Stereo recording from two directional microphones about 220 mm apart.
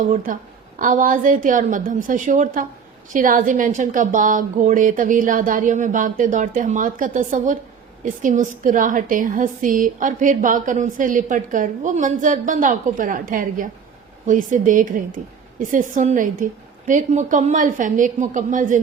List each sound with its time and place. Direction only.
0.0 s a woman's voice: 35° right (ahead or behind)